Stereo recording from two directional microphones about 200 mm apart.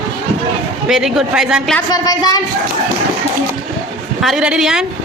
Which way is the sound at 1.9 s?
20° left (ahead or behind).